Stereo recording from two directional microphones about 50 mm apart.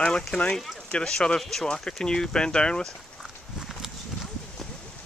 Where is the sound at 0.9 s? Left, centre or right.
Centre.